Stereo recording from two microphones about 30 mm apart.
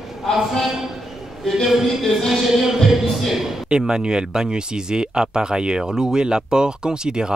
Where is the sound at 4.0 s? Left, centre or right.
Right.